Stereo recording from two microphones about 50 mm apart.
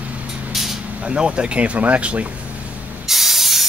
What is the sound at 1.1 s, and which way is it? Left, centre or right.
Speech, centre.